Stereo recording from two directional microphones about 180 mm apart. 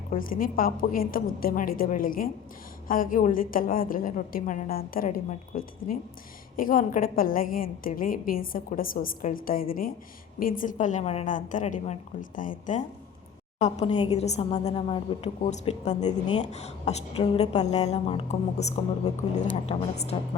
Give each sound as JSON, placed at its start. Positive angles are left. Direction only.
{"t": 0.1, "sound": "a woman's voice", "side_deg": 50}